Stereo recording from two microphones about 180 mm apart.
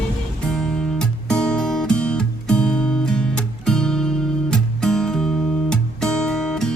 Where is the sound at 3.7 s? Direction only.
5° left (ahead or behind).